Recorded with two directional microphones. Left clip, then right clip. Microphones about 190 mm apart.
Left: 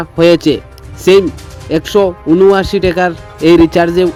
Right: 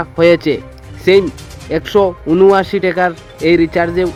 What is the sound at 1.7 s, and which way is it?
Speech, 40° left (ahead or behind).